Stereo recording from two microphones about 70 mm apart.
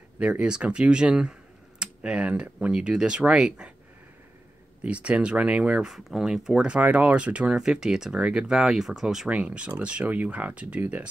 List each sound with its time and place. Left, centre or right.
0.2 s speech: centre
4.8 s speech: centre
5.9 s speech: centre; by 11.1 s right